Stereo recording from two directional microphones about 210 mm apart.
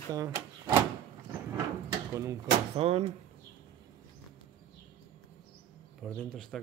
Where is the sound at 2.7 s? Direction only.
30° right (ahead or behind).